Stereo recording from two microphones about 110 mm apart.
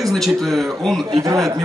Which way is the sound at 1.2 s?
30° right (ahead or behind).